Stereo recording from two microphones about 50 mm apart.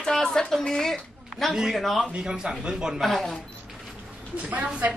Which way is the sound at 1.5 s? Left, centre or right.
Centre.